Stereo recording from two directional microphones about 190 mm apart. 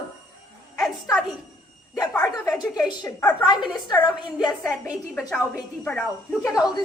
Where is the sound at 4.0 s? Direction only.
25° left (ahead or behind).